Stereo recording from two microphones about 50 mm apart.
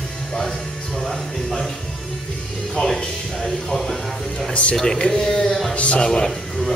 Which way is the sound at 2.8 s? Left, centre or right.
Centre.